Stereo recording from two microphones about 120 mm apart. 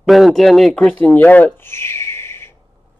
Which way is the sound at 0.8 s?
15° left (ahead or behind).